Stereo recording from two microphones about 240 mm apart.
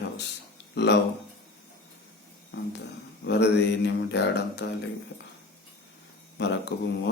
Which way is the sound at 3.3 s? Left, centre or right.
Left.